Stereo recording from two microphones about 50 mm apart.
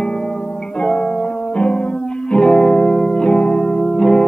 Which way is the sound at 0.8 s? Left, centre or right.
Centre.